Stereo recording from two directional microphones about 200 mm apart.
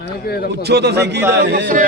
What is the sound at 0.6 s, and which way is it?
A man's voice, 55° right (ahead or behind).